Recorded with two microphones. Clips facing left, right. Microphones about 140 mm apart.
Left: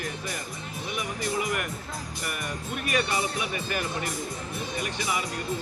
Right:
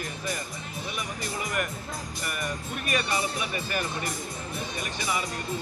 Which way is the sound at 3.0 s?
20° left (ahead or behind).